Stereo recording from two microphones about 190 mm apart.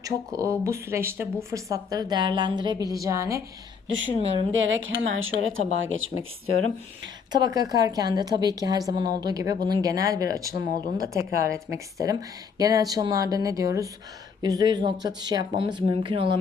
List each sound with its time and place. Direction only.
0.0 s speech: 15° right (ahead or behind)
3.8 s speech: 80° right
4.2 s speech: 30° right (ahead or behind)
4.5 s a woman's voice: 80° right
7.3 s speech: 20° right (ahead or behind)